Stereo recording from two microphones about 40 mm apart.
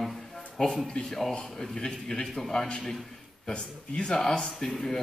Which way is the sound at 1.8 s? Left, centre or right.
Left.